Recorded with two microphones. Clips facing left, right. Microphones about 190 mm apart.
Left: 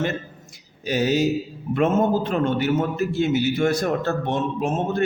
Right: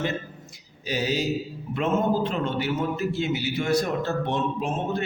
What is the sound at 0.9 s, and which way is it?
A man's voice, 50° left (ahead or behind).